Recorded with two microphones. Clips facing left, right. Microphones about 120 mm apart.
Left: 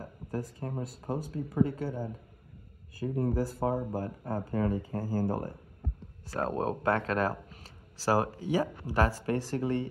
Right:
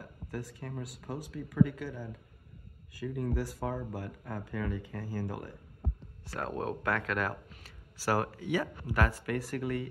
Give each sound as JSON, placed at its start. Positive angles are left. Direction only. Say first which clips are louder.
{"t": 0.0, "sound": "speech", "louder": "left 4 dB", "side_deg": 40}
{"t": 3.0, "sound": "speech", "louder": "left 4 dB", "side_deg": 30}
{"t": 6.3, "sound": "speech", "louder": "left 4 dB", "side_deg": 30}